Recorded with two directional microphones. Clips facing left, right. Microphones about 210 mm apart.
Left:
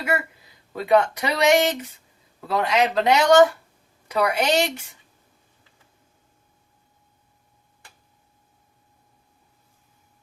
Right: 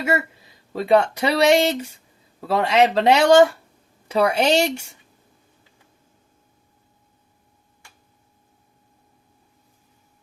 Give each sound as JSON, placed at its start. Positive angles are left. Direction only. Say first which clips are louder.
{"t": 0.8, "sound": "speech", "louder": "right 2 dB", "side_deg": -30}